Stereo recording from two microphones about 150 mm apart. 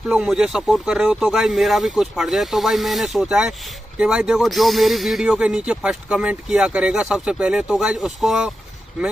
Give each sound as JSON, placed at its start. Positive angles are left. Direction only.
{"t": 0.1, "sound": "speech", "side_deg": -5}